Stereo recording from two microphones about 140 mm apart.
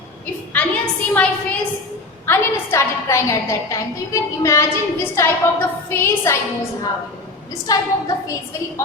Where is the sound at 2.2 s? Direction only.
15° left (ahead or behind).